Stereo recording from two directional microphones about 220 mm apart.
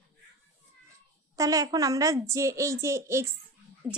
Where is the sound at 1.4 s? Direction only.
15° right (ahead or behind).